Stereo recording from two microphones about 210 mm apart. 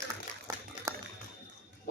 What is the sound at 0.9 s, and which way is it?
Typing, 15° right (ahead or behind).